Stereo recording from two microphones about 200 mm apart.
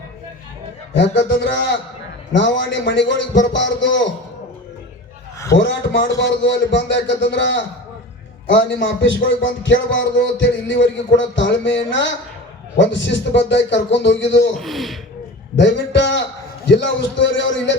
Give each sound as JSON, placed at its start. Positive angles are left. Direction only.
{"t": 0.9, "sound": "a man's voice", "side_deg": 60}
{"t": 2.3, "sound": "a man's voice", "side_deg": 60}
{"t": 5.5, "sound": "a man's voice", "side_deg": 65}
{"t": 14.5, "sound": "speech", "side_deg": 0}
{"t": 15.5, "sound": "a man's voice", "side_deg": 65}